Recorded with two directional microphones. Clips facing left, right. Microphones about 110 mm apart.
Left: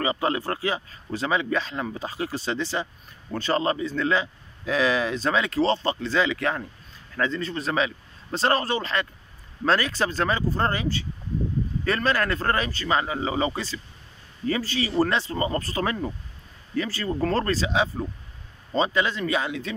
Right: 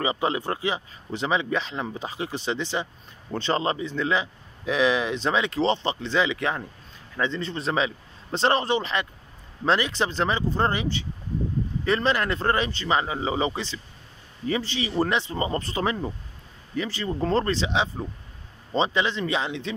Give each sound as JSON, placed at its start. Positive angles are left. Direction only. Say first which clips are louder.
{"t": 0.0, "sound": "speech", "louder": "even", "side_deg": -20}